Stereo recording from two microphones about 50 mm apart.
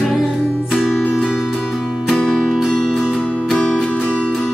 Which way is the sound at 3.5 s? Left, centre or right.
Left.